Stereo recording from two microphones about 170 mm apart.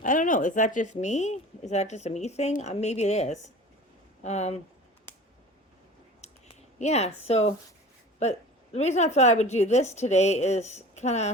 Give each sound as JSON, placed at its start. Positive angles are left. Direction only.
{"t": 0.0, "sound": "a woman's voice", "side_deg": 50}
{"t": 6.2, "sound": "a sound", "side_deg": 40}
{"t": 6.7, "sound": "a woman's voice", "side_deg": 40}